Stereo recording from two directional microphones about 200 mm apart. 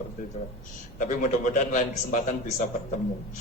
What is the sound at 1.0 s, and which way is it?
A man's voice, 40° left (ahead or behind).